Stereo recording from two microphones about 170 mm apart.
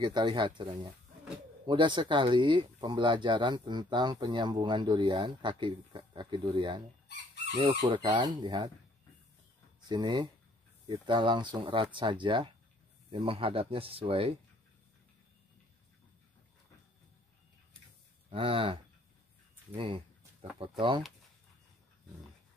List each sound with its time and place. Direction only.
0.0 s speech: 25° right (ahead or behind)
9.8 s speech: 25° right (ahead or behind)
18.3 s speech: 30° right (ahead or behind)